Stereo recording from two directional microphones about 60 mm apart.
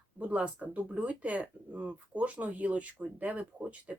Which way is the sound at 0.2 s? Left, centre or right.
Right.